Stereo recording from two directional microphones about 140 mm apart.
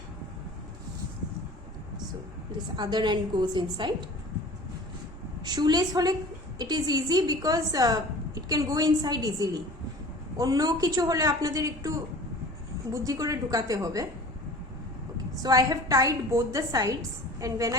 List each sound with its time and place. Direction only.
2.7 s a woman's voice: 30° right (ahead or behind)
5.5 s a woman's voice: 30° right (ahead or behind)
15.4 s a woman's voice: 25° right (ahead or behind)